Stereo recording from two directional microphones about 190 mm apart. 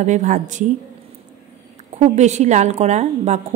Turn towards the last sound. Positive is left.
turn(degrees=-35)  # may be behind; listen again after turning